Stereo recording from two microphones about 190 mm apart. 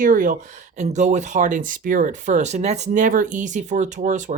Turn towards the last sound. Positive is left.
turn(degrees=-40)  # may be behind; listen again after turning